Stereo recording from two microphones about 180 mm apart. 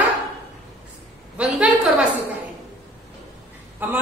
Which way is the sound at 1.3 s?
5° right (ahead or behind).